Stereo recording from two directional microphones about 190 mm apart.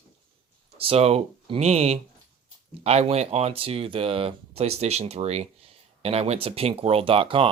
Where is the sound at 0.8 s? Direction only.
30° right (ahead or behind).